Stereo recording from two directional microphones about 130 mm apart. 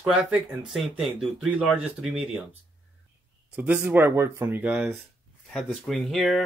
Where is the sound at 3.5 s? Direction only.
10° right (ahead or behind).